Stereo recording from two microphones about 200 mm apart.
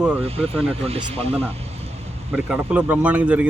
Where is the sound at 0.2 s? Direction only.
30° right (ahead or behind).